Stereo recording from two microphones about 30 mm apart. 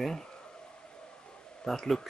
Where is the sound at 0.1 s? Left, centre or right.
Left.